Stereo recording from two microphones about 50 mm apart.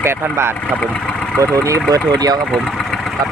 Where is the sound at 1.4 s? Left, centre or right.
Right.